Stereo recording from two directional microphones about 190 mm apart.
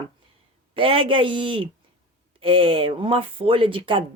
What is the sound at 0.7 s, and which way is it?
Speech, 30° right (ahead or behind).